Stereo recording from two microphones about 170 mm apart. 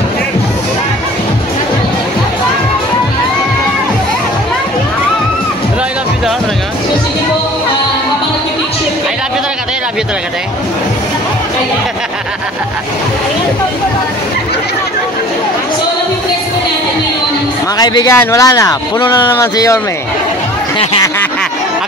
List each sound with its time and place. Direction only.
17.7 s speech: 25° left (ahead or behind)